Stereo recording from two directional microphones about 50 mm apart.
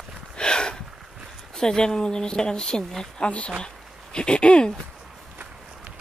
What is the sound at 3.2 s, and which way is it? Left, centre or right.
A woman's voice, left.